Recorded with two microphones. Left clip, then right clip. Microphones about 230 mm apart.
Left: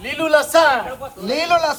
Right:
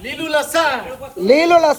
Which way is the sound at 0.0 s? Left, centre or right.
Centre.